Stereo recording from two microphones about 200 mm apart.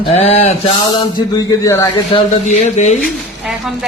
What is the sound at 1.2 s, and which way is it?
Speech, 15° left (ahead or behind).